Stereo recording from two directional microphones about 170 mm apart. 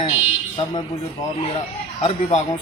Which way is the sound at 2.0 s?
40° left (ahead or behind).